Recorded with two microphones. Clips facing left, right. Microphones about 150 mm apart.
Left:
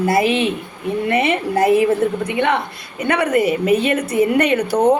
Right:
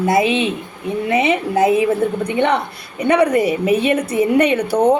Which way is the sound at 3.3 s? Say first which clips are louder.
Even; 30° right (ahead or behind).